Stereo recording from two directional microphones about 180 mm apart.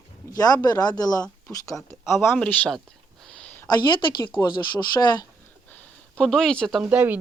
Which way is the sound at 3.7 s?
25° left (ahead or behind).